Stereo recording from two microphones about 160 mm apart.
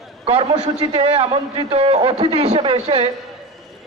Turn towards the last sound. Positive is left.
turn(degrees=-40)  # may be behind; listen again after turning